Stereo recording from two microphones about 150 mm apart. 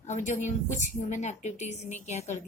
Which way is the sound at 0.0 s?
50° left (ahead or behind).